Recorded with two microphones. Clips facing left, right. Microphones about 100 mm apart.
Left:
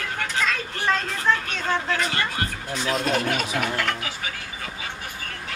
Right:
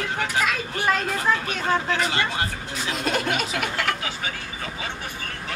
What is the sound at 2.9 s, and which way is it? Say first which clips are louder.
Speech: left 1 dB; centre (ahead or behind).